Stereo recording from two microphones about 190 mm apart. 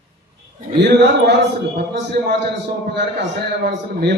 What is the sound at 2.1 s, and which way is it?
Speech, 55° right (ahead or behind).